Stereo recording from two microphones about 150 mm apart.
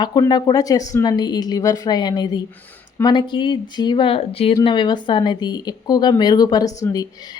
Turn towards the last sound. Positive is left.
turn(degrees=25)  # may be behind; listen again after turning